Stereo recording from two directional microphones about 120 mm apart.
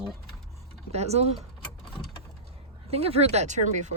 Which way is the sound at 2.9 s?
55° right (ahead or behind).